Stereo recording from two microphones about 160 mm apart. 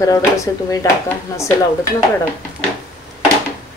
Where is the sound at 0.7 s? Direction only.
20° left (ahead or behind).